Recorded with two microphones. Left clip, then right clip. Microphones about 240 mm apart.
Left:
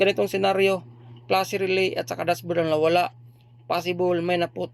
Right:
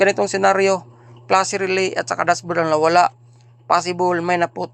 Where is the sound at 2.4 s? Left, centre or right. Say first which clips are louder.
Right 5 dB; centre.